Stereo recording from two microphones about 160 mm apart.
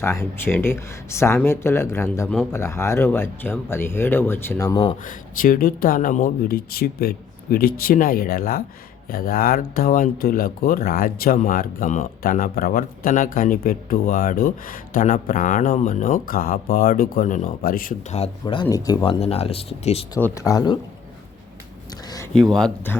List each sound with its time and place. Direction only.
0.0 s speech: 15° left (ahead or behind)
2.2 s speech: centre (ahead or behind)
2.5 s speech: 15° left (ahead or behind)
5.4 s speech: 65° left (ahead or behind)
18.4 s speech: 30° left (ahead or behind)
19.0 s speech: 40° left (ahead or behind)
20.2 s speech: 20° left (ahead or behind)
22.3 s speech: 5° left (ahead or behind)